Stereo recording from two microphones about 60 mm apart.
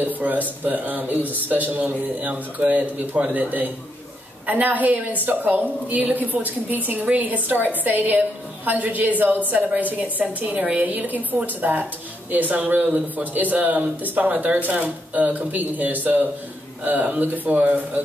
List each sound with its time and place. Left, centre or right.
0.0 s a woman's voice: right